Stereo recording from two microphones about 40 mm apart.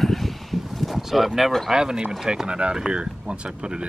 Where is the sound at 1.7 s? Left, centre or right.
Centre.